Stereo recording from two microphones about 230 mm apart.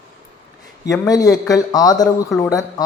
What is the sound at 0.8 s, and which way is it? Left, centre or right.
Speech, centre.